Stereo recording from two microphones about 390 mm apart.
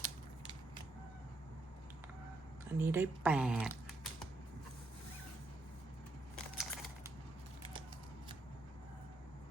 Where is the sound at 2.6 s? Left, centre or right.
Centre.